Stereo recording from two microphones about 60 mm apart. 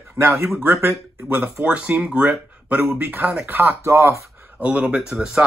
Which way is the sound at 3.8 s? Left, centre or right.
Right.